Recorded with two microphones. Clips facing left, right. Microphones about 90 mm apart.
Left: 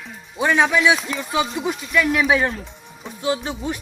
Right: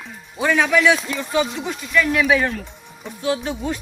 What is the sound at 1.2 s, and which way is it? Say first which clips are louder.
Speech: even; 5° left (ahead or behind).